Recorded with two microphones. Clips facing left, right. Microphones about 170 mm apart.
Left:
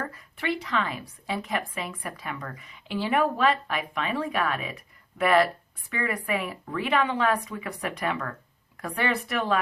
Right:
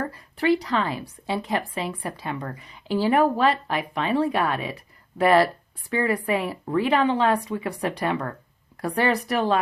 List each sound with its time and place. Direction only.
0.0 s a woman's voice: 35° right (ahead or behind)